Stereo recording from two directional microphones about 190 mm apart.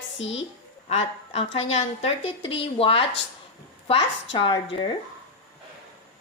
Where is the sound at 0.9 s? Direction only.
35° left (ahead or behind).